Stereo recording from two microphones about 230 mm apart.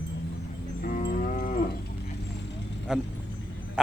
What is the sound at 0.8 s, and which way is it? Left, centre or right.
Cattle, left.